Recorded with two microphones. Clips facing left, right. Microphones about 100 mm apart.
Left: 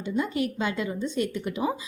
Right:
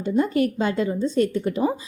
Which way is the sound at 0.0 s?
45° right (ahead or behind).